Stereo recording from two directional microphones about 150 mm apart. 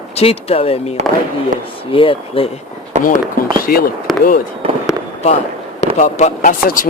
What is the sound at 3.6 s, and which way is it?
Speech, 90° left.